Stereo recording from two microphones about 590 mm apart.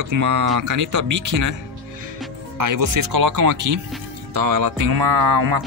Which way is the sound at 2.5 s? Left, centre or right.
Right.